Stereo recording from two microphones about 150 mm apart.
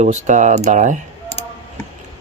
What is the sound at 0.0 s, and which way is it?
Speech, 55° right (ahead or behind).